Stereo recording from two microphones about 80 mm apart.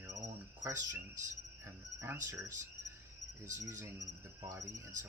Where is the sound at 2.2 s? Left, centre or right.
Right.